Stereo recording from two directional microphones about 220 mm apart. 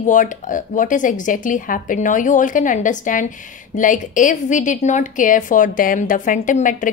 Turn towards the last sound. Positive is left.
turn(degrees=35)  # may be behind; listen again after turning